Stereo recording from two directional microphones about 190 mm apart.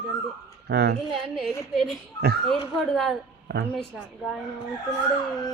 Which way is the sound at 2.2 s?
55° right (ahead or behind).